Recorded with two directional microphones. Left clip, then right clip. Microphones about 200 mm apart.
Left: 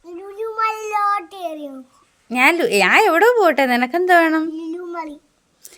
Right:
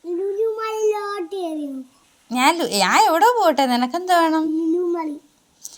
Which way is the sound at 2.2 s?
50° left (ahead or behind).